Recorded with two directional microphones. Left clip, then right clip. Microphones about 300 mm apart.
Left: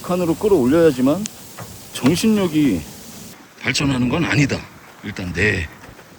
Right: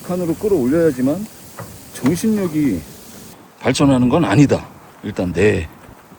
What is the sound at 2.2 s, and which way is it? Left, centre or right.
Speech, centre.